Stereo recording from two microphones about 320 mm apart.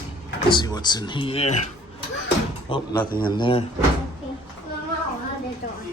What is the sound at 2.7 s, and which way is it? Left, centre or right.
Speech, centre.